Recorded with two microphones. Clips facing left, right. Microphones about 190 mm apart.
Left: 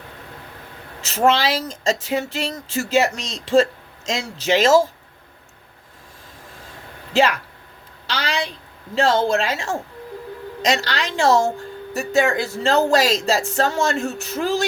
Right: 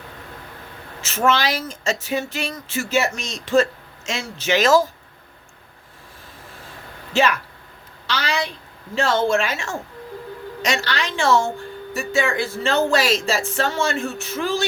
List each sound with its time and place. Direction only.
1.0 s speech: 35° left (ahead or behind)
8.0 s a woman's voice: 30° left (ahead or behind)